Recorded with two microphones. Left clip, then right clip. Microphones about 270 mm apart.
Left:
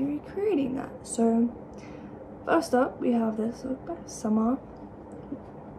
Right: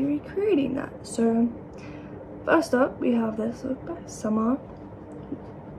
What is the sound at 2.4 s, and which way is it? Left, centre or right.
A woman's voice, centre.